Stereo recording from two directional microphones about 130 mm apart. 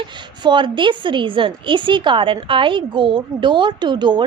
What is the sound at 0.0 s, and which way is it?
A woman's voice, 40° right (ahead or behind).